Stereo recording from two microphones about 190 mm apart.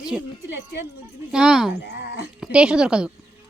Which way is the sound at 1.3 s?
5° right (ahead or behind).